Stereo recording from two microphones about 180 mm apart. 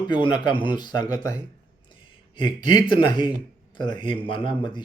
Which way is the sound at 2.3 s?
25° left (ahead or behind).